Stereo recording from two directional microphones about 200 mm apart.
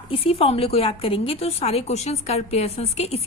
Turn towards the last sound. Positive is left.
turn(degrees=30)  # may be behind; listen again after turning